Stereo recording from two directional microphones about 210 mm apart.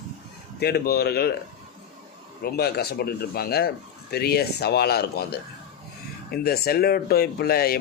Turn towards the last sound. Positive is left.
turn(degrees=45)  # may be behind; listen again after turning